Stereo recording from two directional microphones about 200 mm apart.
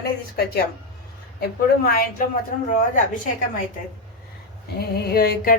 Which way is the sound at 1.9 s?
45° left (ahead or behind).